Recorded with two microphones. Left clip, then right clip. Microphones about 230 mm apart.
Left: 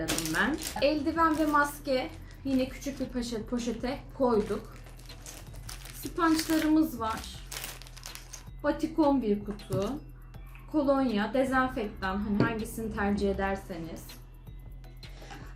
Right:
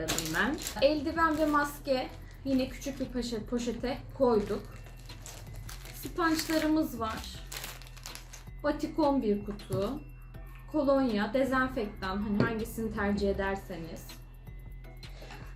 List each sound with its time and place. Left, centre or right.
0.0 s a woman's voice: centre
6.0 s a woman's voice: centre
7.5 s crumpling: centre
8.0 s a woman's voice: centre